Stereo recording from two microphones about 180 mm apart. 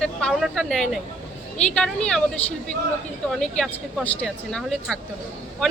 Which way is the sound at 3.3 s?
Centre (ahead or behind).